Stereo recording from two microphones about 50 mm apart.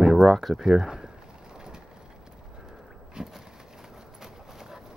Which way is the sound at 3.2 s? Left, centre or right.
Centre.